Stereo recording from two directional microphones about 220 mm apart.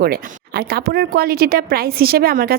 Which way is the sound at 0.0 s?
45° right (ahead or behind).